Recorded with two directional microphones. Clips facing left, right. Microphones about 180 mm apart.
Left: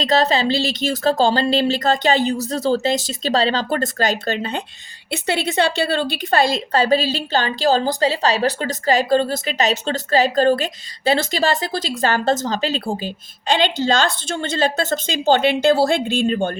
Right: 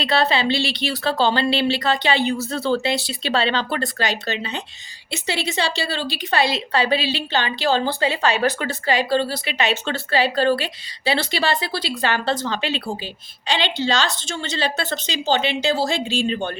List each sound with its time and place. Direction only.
0.0 s a woman's voice: 40° left (ahead or behind)